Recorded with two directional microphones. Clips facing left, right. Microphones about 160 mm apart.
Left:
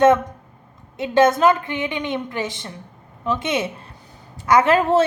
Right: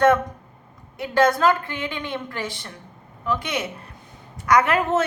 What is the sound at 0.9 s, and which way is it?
A woman's voice, 20° left (ahead or behind).